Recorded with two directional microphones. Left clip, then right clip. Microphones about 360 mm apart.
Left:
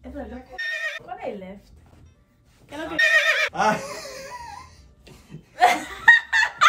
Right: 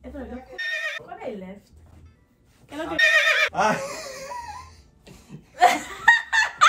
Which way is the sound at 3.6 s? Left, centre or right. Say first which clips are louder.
Even; centre.